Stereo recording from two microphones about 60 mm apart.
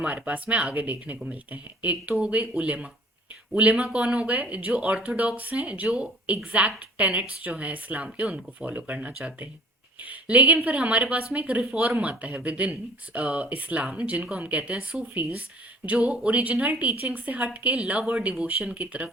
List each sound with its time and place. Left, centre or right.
0.0 s speech: right
3.8 s speech: centre